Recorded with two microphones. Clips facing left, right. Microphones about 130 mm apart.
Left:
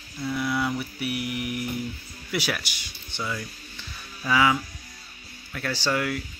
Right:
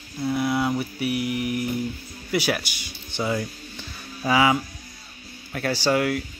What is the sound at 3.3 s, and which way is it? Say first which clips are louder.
Music: right 8 dB; 45° right (ahead or behind).